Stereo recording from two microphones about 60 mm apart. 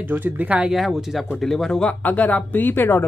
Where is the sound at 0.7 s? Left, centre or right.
Centre.